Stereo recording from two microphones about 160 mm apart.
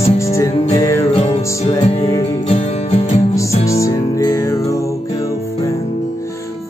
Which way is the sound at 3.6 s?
20° left (ahead or behind).